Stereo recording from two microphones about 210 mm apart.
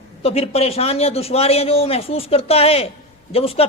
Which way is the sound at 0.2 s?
30° left (ahead or behind).